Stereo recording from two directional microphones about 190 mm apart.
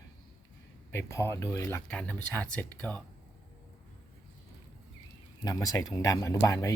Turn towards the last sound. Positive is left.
turn(degrees=15)  # may be behind; listen again after turning